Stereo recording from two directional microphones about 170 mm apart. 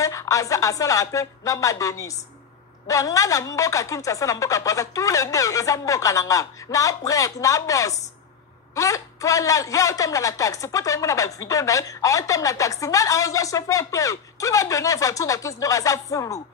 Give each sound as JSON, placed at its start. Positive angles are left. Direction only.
{"t": 0.0, "sound": "a man's voice", "side_deg": 20}